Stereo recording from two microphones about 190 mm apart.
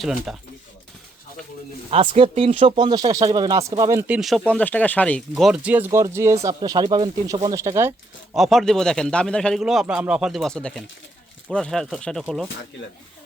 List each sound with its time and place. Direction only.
0.0 s speech: centre (ahead or behind)
1.9 s speech: 30° right (ahead or behind)
4.1 s speech: centre (ahead or behind)
8.4 s speech: centre (ahead or behind)